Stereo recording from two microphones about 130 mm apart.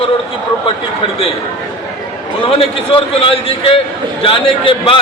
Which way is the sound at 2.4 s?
45° left (ahead or behind).